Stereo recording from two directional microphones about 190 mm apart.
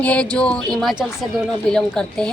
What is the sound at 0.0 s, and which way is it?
A woman's voice, 5° left (ahead or behind).